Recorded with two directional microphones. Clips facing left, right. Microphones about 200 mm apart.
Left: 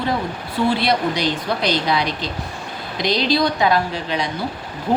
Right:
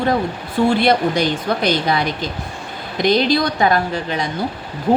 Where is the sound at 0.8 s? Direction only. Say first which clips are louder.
Right 4 dB; 50° right (ahead or behind).